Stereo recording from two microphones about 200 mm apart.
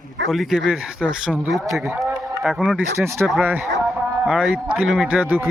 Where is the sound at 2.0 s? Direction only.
Centre (ahead or behind).